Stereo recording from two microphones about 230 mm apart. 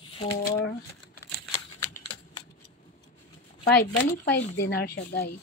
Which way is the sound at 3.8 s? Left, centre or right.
Left.